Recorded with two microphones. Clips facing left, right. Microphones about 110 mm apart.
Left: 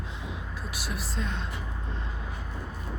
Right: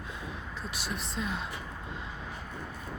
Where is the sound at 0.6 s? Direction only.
5° left (ahead or behind).